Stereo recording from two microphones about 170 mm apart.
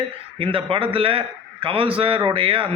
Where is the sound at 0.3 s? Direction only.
30° right (ahead or behind).